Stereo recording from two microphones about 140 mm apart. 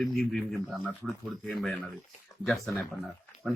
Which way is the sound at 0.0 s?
Centre (ahead or behind).